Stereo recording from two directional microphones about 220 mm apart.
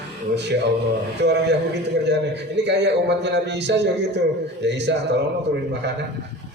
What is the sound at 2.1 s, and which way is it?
A man's voice, 50° right (ahead or behind).